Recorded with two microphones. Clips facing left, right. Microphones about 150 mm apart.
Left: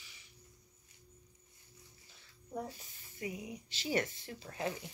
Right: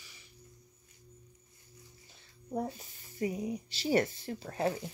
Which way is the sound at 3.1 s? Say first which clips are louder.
Right 8 dB; 35° right (ahead or behind).